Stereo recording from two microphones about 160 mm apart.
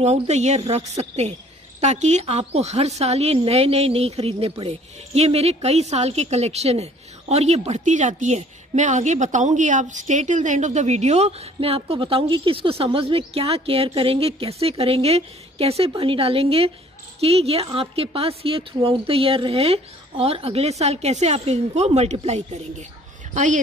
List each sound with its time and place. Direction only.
0.0 s a woman's voice: 45° right (ahead or behind)